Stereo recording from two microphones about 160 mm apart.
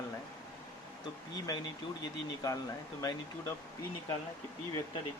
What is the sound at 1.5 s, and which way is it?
Speech, 20° left (ahead or behind).